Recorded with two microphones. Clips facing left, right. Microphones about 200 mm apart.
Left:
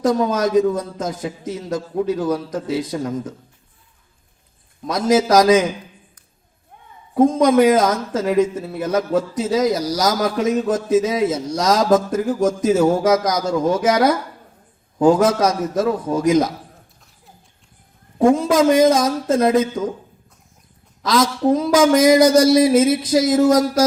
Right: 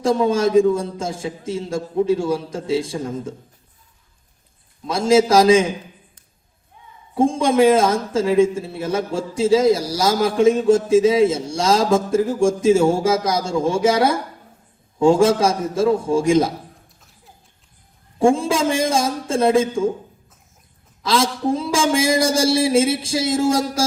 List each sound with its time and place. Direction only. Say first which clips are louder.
0.0 s a man's voice: right 1 dB; 30° right (ahead or behind)
4.9 s a man's voice: right 1 dB; 30° right (ahead or behind)
6.7 s a sound: left 2 dB; 55° left (ahead or behind)
7.2 s a man's voice: left 2 dB; 30° right (ahead or behind)
18.2 s a man's voice: left 3 dB; 30° right (ahead or behind)
21.0 s a man's voice: left 2 dB; 30° right (ahead or behind)